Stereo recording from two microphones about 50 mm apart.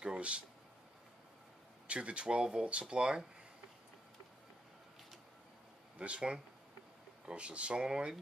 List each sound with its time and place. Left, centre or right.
0.0 s a sound: right
1.9 s speech: right
5.9 s speech: right